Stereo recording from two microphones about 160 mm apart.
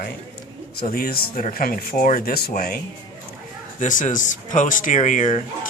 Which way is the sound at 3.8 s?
50° left (ahead or behind).